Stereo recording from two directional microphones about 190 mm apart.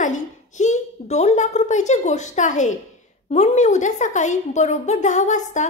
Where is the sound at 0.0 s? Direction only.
40° left (ahead or behind).